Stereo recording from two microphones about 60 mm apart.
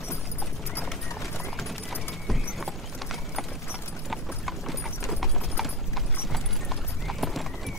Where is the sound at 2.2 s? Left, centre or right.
Centre.